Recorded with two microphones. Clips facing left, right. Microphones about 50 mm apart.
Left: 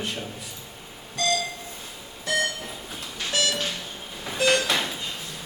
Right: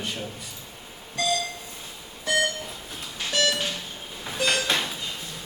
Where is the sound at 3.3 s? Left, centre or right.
Centre.